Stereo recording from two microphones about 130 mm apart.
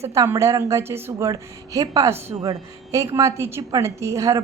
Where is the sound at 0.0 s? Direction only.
20° right (ahead or behind).